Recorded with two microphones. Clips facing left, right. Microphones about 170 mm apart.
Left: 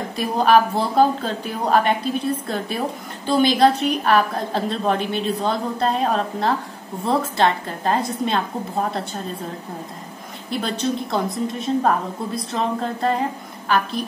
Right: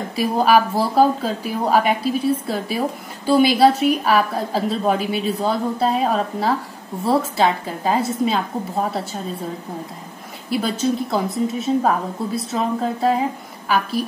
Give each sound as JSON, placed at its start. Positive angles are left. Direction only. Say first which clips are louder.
{"t": 0.1, "sound": "a woman's voice", "louder": "right 1 dB", "side_deg": -5}
{"t": 10.5, "sound": "a woman's voice", "louder": "right 3 dB", "side_deg": -5}